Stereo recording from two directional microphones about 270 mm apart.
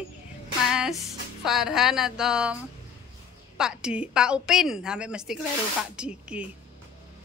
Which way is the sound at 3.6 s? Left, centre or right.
Centre.